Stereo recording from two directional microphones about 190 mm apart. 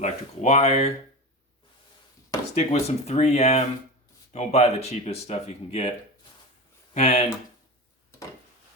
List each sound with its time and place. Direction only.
0.0 s speech: 35° left (ahead or behind)
2.6 s speech: 35° left (ahead or behind)
6.9 s speech: 35° left (ahead or behind)
8.1 s a sound: 15° left (ahead or behind)